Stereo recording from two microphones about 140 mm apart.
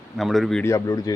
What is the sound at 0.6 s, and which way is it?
Speech, 20° left (ahead or behind).